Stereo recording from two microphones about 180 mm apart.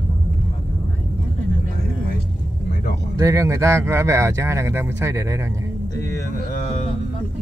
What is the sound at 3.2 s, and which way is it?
Speech, 15° right (ahead or behind).